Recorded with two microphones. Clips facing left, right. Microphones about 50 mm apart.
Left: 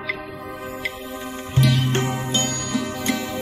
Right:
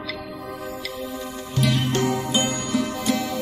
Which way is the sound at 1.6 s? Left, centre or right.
Left.